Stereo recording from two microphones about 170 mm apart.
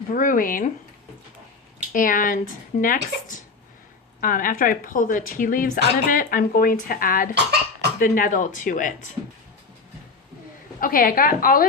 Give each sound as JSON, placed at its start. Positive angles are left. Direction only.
{"t": 0.1, "sound": "speech", "side_deg": 50}
{"t": 1.9, "sound": "speech", "side_deg": 55}
{"t": 7.3, "sound": "cough", "side_deg": -75}
{"t": 7.9, "sound": "speech", "side_deg": 55}
{"t": 10.8, "sound": "speech", "side_deg": 55}